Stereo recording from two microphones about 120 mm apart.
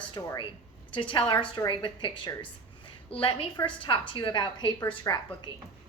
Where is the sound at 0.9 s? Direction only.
45° left (ahead or behind).